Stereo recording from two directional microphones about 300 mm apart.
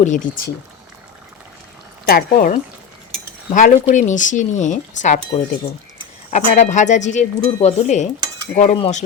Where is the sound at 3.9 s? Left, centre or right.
Left.